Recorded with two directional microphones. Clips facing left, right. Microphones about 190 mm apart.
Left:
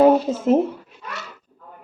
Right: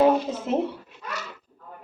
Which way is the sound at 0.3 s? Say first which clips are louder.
Left 7 dB; 45° left (ahead or behind).